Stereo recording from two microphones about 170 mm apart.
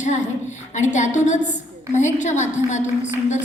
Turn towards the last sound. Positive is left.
turn(degrees=45)  # may be behind; listen again after turning